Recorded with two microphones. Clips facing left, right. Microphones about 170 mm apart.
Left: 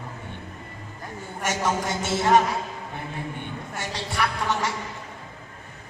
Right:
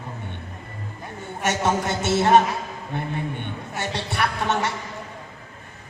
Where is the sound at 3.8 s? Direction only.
65° right (ahead or behind).